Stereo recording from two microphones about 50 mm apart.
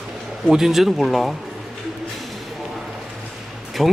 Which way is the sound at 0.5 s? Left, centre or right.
Centre.